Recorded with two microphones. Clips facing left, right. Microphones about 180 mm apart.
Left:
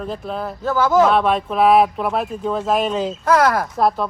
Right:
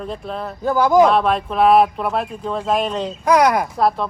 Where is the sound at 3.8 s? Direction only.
Centre (ahead or behind).